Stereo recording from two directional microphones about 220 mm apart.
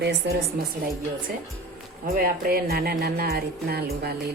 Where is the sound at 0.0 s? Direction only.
50° right (ahead or behind).